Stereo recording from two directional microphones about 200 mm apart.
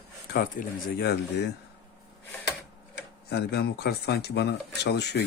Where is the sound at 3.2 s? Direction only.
55° left (ahead or behind).